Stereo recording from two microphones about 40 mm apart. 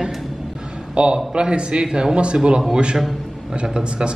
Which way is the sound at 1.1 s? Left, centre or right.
Right.